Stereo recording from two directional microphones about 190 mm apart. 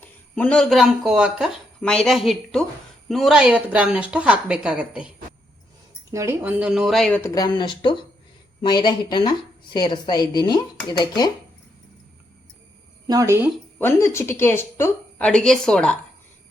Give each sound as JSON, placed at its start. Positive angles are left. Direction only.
{"t": 0.0, "sound": "speech", "side_deg": 5}
{"t": 7.2, "sound": "a woman's voice", "side_deg": 15}
{"t": 13.1, "sound": "speech", "side_deg": -15}
{"t": 13.7, "sound": "a woman's voice", "side_deg": 10}